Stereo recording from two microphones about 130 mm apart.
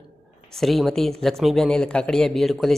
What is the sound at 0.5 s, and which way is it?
Speech, centre (ahead or behind).